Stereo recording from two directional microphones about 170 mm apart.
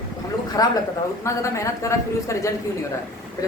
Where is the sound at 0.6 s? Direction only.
20° left (ahead or behind).